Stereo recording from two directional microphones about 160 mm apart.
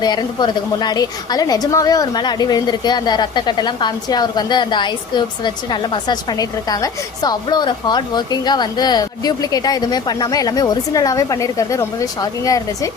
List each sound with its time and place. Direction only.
0.0 s a woman's voice: 25° left (ahead or behind)